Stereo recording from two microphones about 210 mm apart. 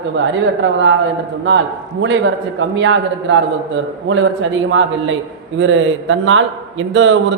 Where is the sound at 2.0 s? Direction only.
60° right (ahead or behind).